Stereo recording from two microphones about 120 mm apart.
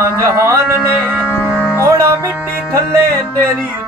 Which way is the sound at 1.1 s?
10° right (ahead or behind).